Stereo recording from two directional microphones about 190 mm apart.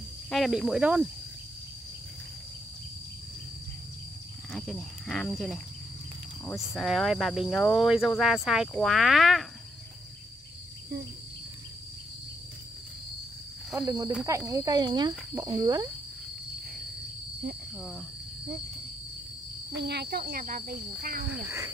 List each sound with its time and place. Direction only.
0.3 s speech: centre (ahead or behind)
4.5 s speech: centre (ahead or behind)
6.6 s speech: centre (ahead or behind)
13.7 s speech: 15° right (ahead or behind)
17.7 s speech: centre (ahead or behind)
19.8 s cricket: 60° right (ahead or behind)
21.3 s speech: 10° right (ahead or behind)